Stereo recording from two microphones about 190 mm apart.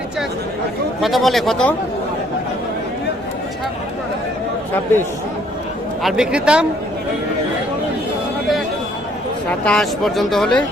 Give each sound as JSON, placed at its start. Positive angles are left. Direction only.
{"t": 1.0, "sound": "speech", "side_deg": 0}
{"t": 6.0, "sound": "speech", "side_deg": 0}
{"t": 9.5, "sound": "speech", "side_deg": 5}